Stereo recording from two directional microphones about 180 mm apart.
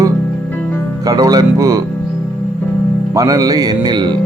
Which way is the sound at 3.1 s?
20° right (ahead or behind).